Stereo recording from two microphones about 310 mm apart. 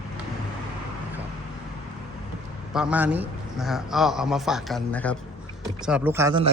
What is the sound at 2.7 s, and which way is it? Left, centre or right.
A man's voice, centre.